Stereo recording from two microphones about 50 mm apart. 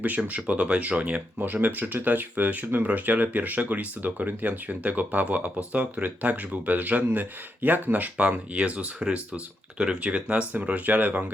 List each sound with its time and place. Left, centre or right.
0.2 s speech: right
1.7 s speech: right